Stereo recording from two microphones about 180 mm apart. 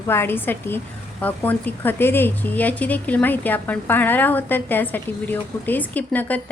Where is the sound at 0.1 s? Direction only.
10° left (ahead or behind).